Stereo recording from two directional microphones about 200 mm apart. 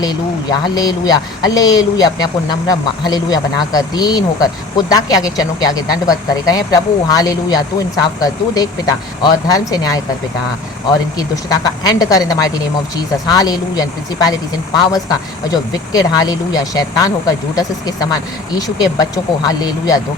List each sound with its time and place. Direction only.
0.0 s speech: 20° left (ahead or behind)
11.2 s speech: 20° left (ahead or behind)